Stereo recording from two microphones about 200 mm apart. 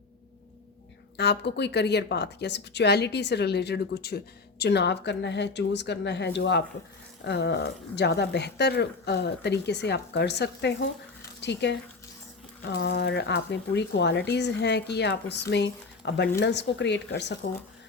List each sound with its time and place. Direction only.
1.1 s speech: 55° left (ahead or behind)